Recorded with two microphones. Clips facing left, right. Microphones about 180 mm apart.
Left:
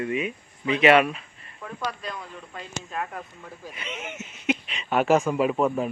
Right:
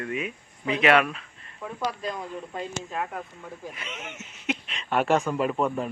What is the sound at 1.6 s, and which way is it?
Speech, 10° right (ahead or behind).